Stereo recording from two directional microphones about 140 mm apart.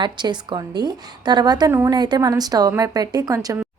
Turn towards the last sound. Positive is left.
turn(degrees=-25)  # may be behind; listen again after turning